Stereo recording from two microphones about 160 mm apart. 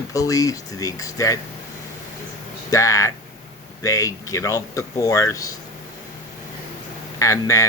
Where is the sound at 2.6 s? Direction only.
20° left (ahead or behind).